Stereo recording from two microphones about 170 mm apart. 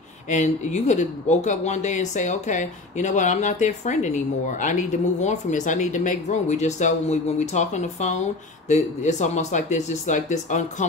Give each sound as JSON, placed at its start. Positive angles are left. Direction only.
{"t": 0.3, "sound": "speech", "side_deg": 45}